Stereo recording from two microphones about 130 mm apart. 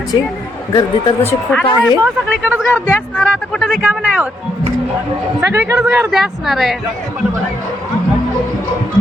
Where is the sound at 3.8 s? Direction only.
10° right (ahead or behind).